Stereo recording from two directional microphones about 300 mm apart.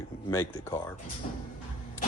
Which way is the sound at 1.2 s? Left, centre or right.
Left.